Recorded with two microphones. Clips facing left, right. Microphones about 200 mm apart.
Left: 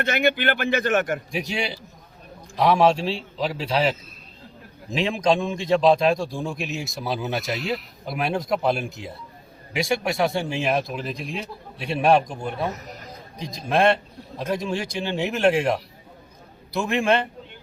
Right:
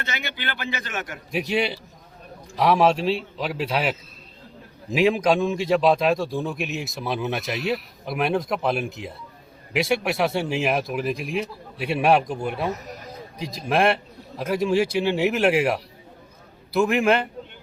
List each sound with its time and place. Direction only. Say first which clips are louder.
0.0 s a man's voice: left 11 dB; 55° left (ahead or behind)
1.3 s a man's voice: right 4 dB; centre (ahead or behind)